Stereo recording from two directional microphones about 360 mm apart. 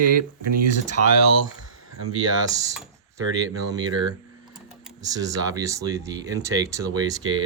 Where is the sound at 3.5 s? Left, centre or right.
Centre.